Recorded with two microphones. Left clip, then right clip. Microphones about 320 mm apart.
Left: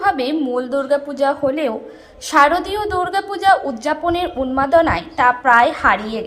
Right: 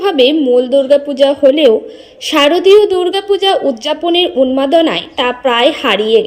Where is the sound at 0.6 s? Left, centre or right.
Left.